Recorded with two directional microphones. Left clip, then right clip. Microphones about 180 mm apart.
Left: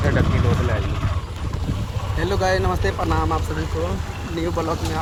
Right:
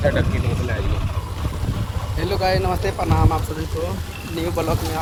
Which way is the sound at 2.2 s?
5° left (ahead or behind).